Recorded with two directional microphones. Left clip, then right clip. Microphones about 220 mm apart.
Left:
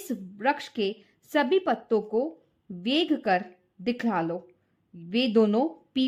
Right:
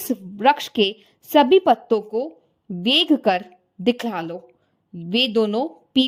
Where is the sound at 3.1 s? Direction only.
30° right (ahead or behind).